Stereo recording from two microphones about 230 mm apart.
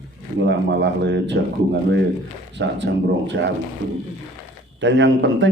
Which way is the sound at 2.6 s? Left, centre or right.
Right.